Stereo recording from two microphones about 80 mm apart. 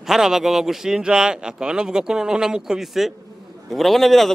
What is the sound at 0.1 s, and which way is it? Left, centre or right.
A man's voice, centre.